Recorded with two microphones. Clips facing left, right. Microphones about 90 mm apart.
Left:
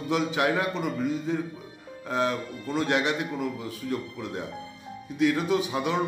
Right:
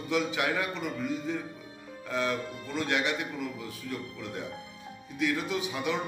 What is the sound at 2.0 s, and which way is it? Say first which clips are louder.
A man's voice: left 4 dB; 30° left (ahead or behind).